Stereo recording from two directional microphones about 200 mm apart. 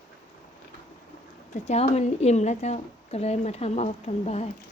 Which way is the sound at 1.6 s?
35° left (ahead or behind).